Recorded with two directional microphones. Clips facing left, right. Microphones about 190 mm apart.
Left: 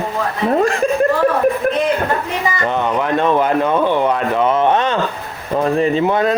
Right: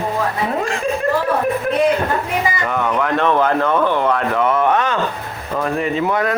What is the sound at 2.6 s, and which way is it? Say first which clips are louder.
A man's voice: left 1 dB; 25° left (ahead or behind).